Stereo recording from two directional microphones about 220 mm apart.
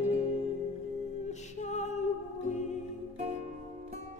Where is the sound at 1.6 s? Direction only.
30° left (ahead or behind).